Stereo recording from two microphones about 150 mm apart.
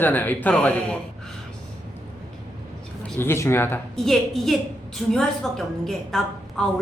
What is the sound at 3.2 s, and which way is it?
Speech, 15° left (ahead or behind).